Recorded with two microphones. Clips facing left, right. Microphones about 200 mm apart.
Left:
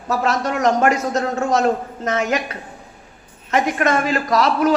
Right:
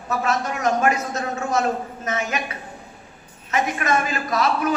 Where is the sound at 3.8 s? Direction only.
70° left (ahead or behind).